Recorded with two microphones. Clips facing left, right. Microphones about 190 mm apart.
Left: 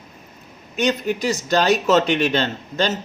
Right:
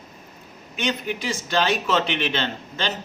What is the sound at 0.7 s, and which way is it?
A man's voice, 45° left (ahead or behind).